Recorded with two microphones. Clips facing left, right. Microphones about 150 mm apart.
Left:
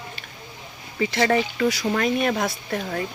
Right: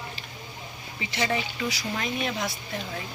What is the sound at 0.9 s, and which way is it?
Speech, 70° left (ahead or behind).